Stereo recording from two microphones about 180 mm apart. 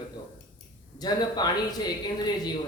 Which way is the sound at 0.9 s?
20° left (ahead or behind).